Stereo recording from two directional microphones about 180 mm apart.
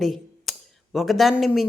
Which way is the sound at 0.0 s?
Centre (ahead or behind).